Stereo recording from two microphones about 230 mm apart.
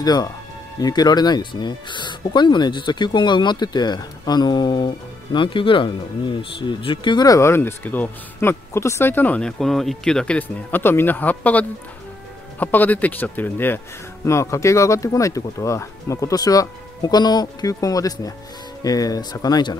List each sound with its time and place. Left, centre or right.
0.0 s speech: centre